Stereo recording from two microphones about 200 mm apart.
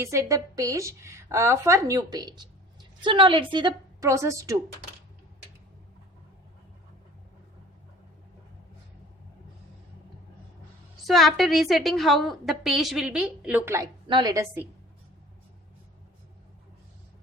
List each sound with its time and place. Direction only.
0.0 s a woman's voice: 15° right (ahead or behind)
11.0 s a woman's voice: centre (ahead or behind)
14.1 s a woman's voice: 20° right (ahead or behind)